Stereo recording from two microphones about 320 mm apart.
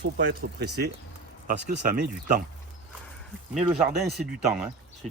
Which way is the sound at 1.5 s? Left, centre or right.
Right.